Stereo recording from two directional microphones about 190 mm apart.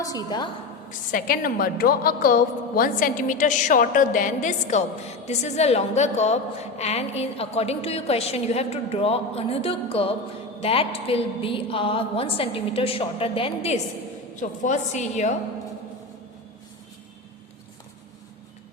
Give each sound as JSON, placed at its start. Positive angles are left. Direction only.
{"t": 0.0, "sound": "a woman's voice", "side_deg": 20}
{"t": 0.9, "sound": "a woman's voice", "side_deg": 45}